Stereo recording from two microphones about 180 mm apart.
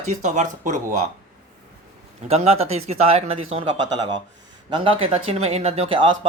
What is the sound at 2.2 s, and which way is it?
Speech, 35° right (ahead or behind).